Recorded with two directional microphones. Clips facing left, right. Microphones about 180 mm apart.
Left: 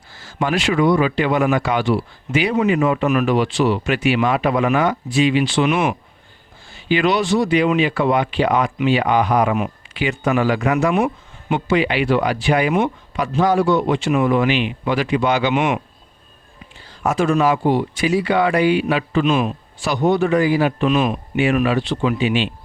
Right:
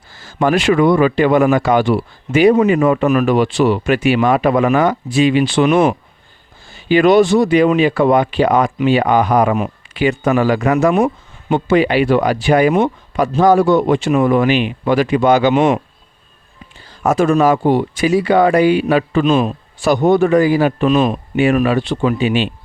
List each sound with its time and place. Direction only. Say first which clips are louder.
0.3 s speech: right 6 dB; 50° right (ahead or behind)
17.0 s speech: right 4 dB; 45° right (ahead or behind)
19.8 s speech: right 5 dB; 50° right (ahead or behind)